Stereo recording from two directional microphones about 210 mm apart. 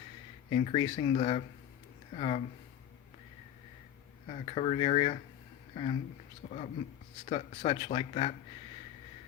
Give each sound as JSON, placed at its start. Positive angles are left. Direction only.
{"t": 0.5, "sound": "speech", "side_deg": 25}
{"t": 4.3, "sound": "speech", "side_deg": 25}